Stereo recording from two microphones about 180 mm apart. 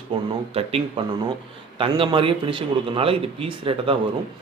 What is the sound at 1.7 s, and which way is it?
A man's voice, 30° right (ahead or behind).